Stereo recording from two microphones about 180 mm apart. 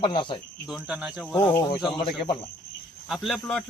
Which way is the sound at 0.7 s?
5° right (ahead or behind).